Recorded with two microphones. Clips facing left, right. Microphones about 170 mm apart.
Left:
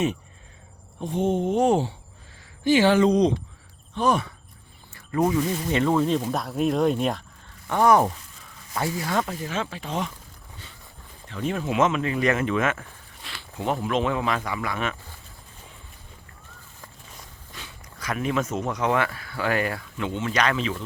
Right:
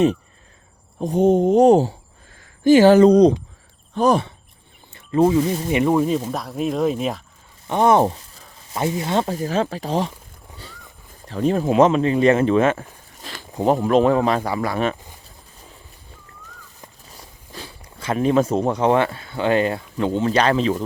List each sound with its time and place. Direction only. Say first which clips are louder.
0.9 s speech: right 8 dB; 40° right (ahead or behind)
5.6 s speech: right 4 dB; 15° right (ahead or behind)
7.7 s speech: right 3 dB; 25° right (ahead or behind)
11.3 s speech: right 8 dB; 35° right (ahead or behind)
17.5 s speech: right 7 dB; 35° right (ahead or behind)
20.0 s speech: right 7 dB; 35° right (ahead or behind)